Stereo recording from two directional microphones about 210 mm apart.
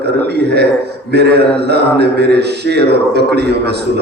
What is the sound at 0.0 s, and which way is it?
A man's voice, 50° right (ahead or behind).